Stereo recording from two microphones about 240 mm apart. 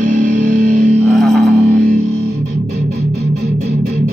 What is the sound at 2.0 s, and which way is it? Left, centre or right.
Music, right.